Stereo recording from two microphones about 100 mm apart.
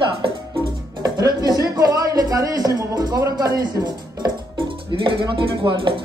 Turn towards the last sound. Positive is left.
turn(degrees=-55)  # may be behind; listen again after turning